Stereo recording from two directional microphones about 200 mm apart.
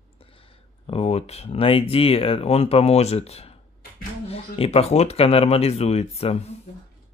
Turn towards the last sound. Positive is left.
turn(degrees=30)  # may be behind; listen again after turning